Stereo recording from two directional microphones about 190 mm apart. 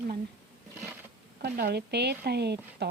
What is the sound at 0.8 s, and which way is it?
Bee, 10° right (ahead or behind).